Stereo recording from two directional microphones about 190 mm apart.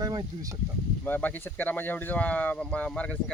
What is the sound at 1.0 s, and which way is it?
Speech, 10° left (ahead or behind).